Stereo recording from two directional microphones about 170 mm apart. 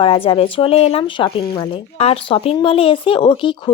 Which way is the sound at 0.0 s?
30° left (ahead or behind).